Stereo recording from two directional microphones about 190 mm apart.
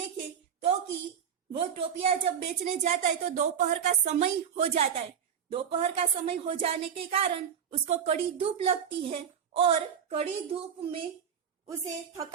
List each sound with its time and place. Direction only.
1.5 s a woman's voice: 30° right (ahead or behind)
11.7 s a woman's voice: 15° right (ahead or behind)